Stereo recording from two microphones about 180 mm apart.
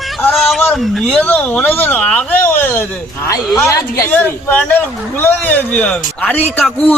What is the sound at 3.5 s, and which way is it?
Speech, 15° left (ahead or behind).